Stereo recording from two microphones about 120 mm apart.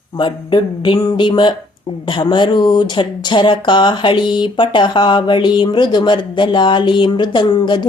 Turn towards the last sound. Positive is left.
turn(degrees=40)  # may be behind; listen again after turning